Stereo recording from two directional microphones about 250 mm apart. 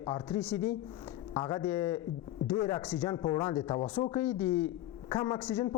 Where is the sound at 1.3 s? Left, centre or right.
Centre.